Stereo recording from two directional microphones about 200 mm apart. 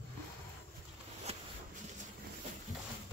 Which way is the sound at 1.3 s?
30° right (ahead or behind).